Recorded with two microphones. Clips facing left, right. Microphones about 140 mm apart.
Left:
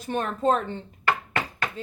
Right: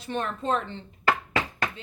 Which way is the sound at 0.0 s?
45° left (ahead or behind).